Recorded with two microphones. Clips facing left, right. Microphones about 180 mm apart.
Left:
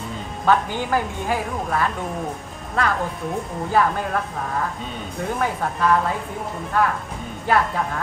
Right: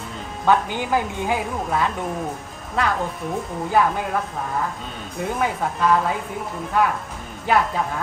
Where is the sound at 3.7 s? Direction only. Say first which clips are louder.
Even; 10° right (ahead or behind).